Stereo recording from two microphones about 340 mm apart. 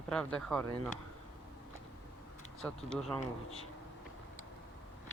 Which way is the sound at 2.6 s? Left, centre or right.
Centre.